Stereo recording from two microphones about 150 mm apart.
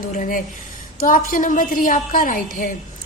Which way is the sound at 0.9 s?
65° left (ahead or behind).